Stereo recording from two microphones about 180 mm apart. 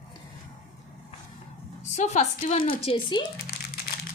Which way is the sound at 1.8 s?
40° left (ahead or behind).